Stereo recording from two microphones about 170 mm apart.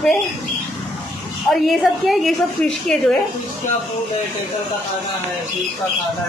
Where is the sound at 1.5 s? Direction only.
Centre (ahead or behind).